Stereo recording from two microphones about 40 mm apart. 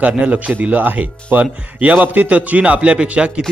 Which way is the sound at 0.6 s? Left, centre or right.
Right.